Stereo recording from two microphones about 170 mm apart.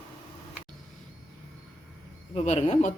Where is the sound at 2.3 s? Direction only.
40° left (ahead or behind).